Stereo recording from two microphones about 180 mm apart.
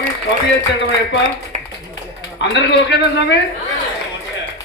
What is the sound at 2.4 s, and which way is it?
Speech, 75° left (ahead or behind).